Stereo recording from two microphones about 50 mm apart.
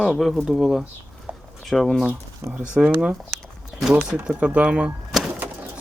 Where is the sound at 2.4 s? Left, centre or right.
Right.